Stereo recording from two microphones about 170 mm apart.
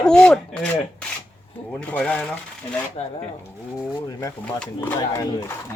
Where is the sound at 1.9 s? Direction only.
5° left (ahead or behind).